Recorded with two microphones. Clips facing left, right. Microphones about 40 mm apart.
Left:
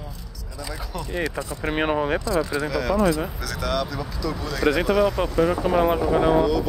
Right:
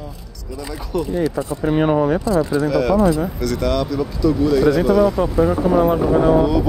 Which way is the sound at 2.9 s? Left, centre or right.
Centre.